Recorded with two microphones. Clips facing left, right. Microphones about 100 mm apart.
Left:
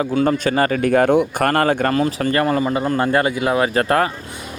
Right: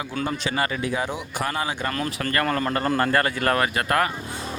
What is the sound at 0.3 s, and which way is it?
Speech, 45° left (ahead or behind).